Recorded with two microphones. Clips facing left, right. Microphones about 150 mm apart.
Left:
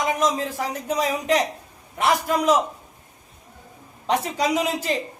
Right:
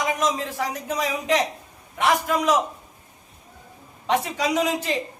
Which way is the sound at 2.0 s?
35° left (ahead or behind).